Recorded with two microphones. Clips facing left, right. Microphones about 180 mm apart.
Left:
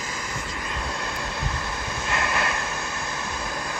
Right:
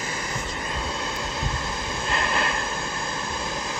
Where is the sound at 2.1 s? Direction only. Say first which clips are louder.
Even; 30° right (ahead or behind).